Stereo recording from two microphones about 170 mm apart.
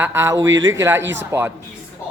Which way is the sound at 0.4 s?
90° right.